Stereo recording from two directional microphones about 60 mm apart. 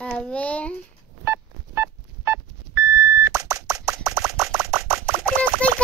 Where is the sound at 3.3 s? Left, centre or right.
Right.